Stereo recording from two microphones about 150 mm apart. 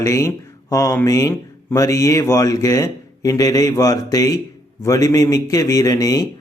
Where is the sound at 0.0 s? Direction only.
20° left (ahead or behind).